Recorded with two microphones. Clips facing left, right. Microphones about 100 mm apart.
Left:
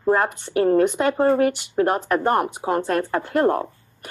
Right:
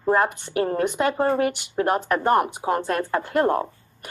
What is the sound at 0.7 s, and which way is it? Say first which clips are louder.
Speech: left 7 dB; 10° right (ahead or behind).